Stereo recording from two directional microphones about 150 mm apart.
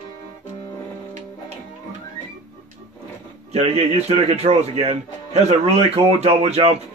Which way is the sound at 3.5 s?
45° right (ahead or behind).